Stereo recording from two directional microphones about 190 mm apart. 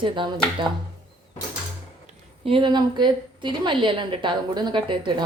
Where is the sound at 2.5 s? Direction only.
25° right (ahead or behind).